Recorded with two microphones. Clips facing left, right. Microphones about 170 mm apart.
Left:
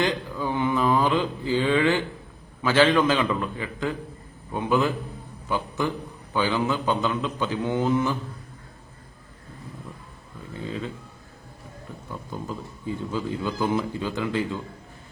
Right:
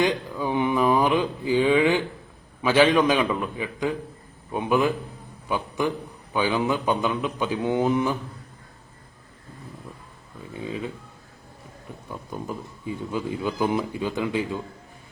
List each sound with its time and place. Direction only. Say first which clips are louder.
0.0 s a man's voice: right 2 dB; 15° right (ahead or behind)
10.7 s speech: right 1 dB; 15° right (ahead or behind)
12.3 s speech: right 1 dB; 15° right (ahead or behind)